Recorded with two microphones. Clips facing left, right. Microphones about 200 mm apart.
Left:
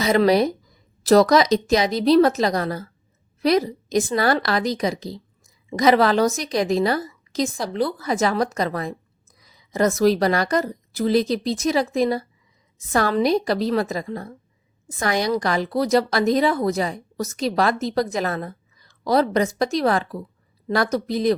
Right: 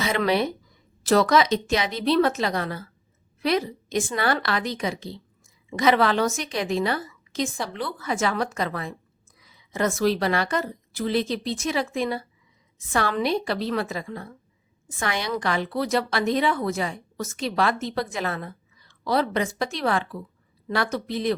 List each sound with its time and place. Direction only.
0.0 s a woman's voice: 40° left (ahead or behind)